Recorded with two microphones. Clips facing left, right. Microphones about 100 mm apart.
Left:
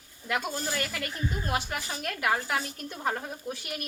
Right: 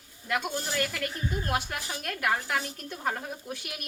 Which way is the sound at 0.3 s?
Centre (ahead or behind).